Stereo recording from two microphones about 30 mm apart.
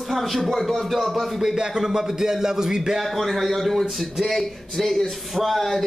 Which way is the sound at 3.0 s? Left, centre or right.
Centre.